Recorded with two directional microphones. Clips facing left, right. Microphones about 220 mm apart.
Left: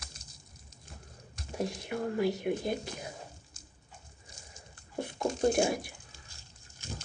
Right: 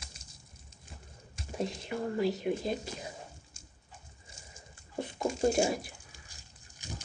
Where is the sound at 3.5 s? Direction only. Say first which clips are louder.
Even; 25° right (ahead or behind).